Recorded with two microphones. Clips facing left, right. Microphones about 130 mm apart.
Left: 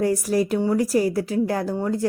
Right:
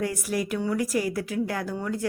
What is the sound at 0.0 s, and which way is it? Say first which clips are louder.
Speech: left 7 dB; 35° left (ahead or behind).